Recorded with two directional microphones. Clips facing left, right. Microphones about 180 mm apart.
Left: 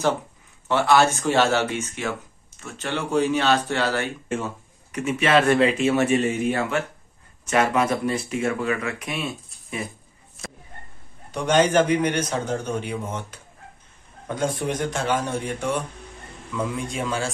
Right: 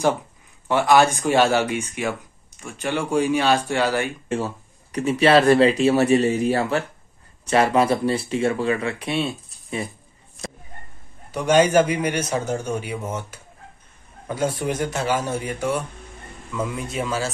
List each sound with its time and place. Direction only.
0.7 s a man's voice: 15° right (ahead or behind)
4.9 s speech: 35° right (ahead or behind)
11.3 s a man's voice: 10° right (ahead or behind)